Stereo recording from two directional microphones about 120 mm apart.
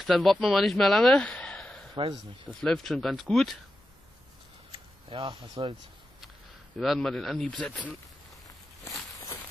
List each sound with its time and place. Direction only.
0.0 s speech: centre (ahead or behind)
2.0 s speech: 55° right (ahead or behind)
2.6 s speech: 5° left (ahead or behind)
5.1 s speech: 45° right (ahead or behind)
6.8 s speech: centre (ahead or behind)